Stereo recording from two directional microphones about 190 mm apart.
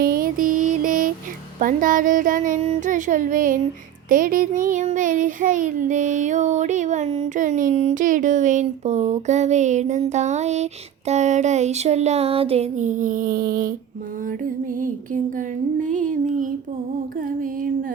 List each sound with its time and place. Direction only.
0.0 s music: 50° right (ahead or behind)
4.1 s child singing: 45° right (ahead or behind)
14.3 s music: 45° right (ahead or behind)